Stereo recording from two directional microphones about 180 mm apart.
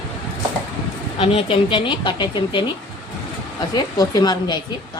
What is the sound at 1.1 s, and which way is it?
Speech, 30° left (ahead or behind).